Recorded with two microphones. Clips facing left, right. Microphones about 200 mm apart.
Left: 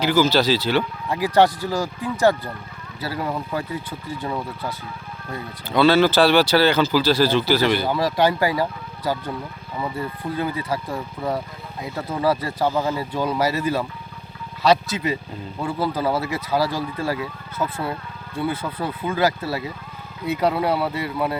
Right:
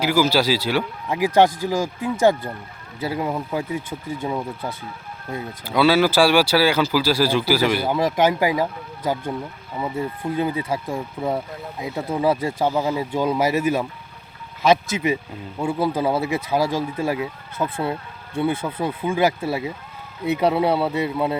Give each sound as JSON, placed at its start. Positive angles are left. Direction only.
{"t": 0.0, "sound": "speech", "side_deg": -10}
{"t": 1.2, "sound": "speech", "side_deg": -20}
{"t": 5.6, "sound": "speech", "side_deg": -10}
{"t": 9.8, "sound": "speech", "side_deg": -15}